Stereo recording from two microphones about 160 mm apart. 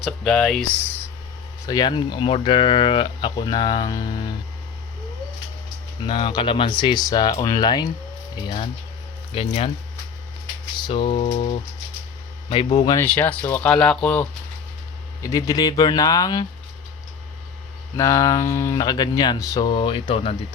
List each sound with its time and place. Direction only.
0.0 s speech: 5° left (ahead or behind)
1.6 s speech: 25° left (ahead or behind)
6.0 s speech: 30° left (ahead or behind)
9.3 s a sound: 35° left (ahead or behind)
10.8 s a sound: 30° left (ahead or behind)
12.5 s speech: 30° left (ahead or behind)
13.0 s speech: 10° left (ahead or behind)
15.2 s speech: 20° left (ahead or behind)
17.9 s speech: 20° left (ahead or behind)